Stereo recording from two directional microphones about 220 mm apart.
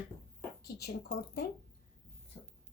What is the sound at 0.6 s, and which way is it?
Speech, 45° left (ahead or behind).